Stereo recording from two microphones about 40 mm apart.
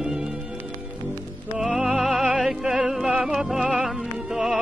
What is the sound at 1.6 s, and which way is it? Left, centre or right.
Opera, centre.